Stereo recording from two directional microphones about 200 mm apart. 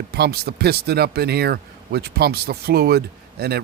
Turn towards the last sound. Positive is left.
turn(degrees=-50)  # may be behind; listen again after turning